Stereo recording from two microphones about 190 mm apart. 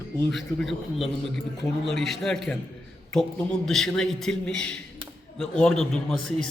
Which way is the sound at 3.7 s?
Centre (ahead or behind).